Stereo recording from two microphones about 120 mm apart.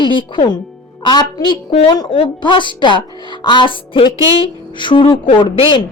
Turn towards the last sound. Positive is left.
turn(degrees=45)  # may be behind; listen again after turning